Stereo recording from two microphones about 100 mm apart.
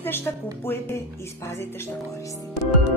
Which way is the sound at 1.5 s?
25° left (ahead or behind).